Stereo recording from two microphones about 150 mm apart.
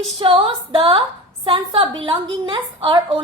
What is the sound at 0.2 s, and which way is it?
A woman's voice, 35° right (ahead or behind).